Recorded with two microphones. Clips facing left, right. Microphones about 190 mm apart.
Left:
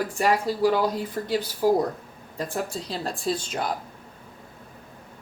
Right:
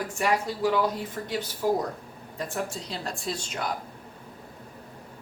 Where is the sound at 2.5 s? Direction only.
35° left (ahead or behind).